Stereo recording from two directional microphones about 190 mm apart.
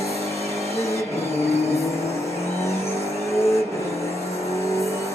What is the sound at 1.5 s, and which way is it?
Vehicle, 35° left (ahead or behind).